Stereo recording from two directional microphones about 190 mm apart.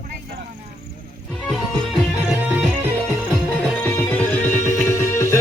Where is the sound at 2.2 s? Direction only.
Centre (ahead or behind).